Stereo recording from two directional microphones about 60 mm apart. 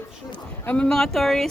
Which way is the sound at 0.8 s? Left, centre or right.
Centre.